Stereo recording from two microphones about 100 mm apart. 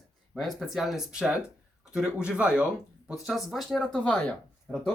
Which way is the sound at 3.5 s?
5° left (ahead or behind).